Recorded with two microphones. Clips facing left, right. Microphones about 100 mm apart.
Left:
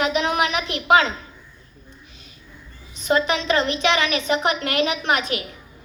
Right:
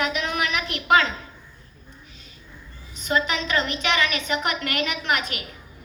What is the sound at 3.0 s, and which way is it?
A woman's voice, 30° left (ahead or behind).